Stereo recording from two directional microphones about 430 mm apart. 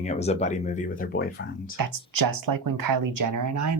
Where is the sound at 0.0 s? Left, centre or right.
Centre.